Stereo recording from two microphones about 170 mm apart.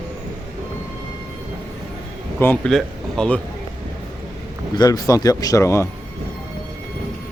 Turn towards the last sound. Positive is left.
turn(degrees=15)  # may be behind; listen again after turning